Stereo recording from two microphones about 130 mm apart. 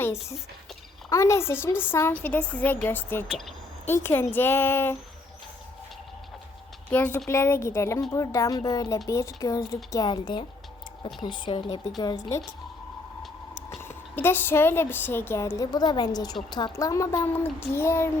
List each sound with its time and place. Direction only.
1.1 s a woman's voice: 20° left (ahead or behind)
3.2 s speech: centre (ahead or behind)
3.8 s a woman's voice: 20° left (ahead or behind)
6.9 s a woman's voice: 10° left (ahead or behind); by 11.8 s 35° left (ahead or behind)
13.8 s a woman's voice: 15° left (ahead or behind)